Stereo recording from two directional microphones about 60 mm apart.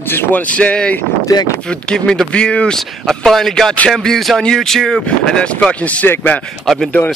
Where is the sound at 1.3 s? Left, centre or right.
Left.